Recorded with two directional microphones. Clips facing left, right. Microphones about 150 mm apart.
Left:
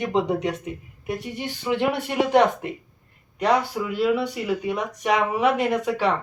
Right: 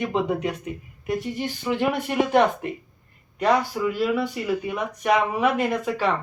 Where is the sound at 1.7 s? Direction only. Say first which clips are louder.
Even; 20° left (ahead or behind).